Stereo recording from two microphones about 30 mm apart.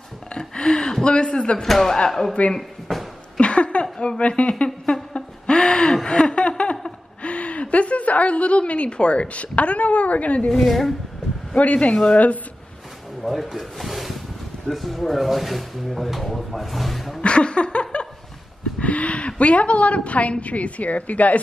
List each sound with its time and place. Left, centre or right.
0.3 s a sound: left
1.0 s a man's voice: left
1.6 s speech: centre
3.3 s a sound: left
4.3 s speech: left
5.1 s a sound: left
6.0 s chuckle: left
7.2 s a woman's voice: left
10.5 s speech: centre
11.5 s a woman's voice: left
11.9 s speech: left
13.2 s speech: centre
17.2 s laughter: left
18.8 s a woman's voice: left